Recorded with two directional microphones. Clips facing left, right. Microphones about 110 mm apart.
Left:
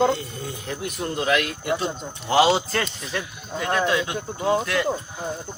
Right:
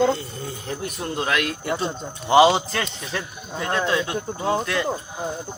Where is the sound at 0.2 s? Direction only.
35° right (ahead or behind).